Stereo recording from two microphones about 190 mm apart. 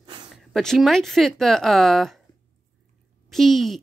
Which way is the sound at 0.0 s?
25° right (ahead or behind).